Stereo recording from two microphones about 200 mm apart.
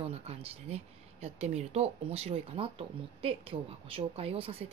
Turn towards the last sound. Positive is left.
turn(degrees=-30)  # may be behind; listen again after turning